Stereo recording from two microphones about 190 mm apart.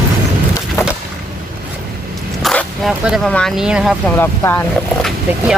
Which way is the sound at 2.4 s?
Centre (ahead or behind).